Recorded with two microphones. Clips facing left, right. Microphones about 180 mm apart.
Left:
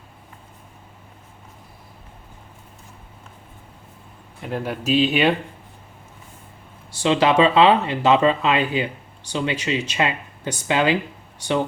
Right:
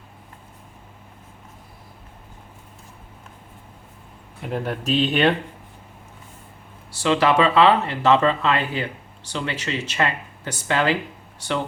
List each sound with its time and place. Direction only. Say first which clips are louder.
4.4 s speech: left 1 dB; centre (ahead or behind)
7.0 s speech: left 2 dB; 20° left (ahead or behind)